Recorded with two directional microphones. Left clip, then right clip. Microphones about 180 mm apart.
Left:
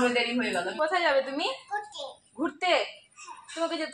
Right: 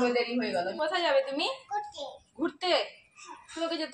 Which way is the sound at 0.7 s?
30° left (ahead or behind).